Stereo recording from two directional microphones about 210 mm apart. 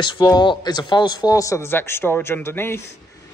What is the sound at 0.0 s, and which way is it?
A man's voice, 20° left (ahead or behind).